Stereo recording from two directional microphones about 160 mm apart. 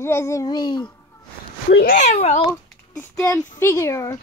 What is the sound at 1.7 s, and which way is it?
Speech, 75° left (ahead or behind).